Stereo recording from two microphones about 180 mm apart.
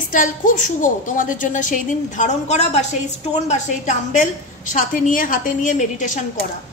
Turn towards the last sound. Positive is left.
turn(degrees=45)  # may be behind; listen again after turning